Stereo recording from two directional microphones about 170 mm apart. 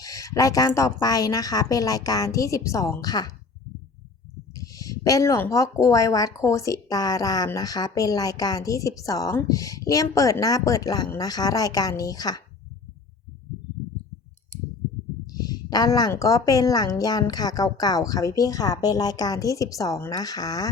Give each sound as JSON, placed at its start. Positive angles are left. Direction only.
{"t": 0.0, "sound": "speech", "side_deg": 20}
{"t": 4.5, "sound": "speech", "side_deg": 20}
{"t": 15.3, "sound": "speech", "side_deg": 20}